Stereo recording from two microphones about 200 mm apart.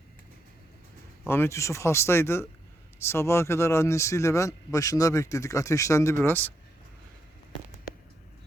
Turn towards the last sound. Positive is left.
turn(degrees=10)  # may be behind; listen again after turning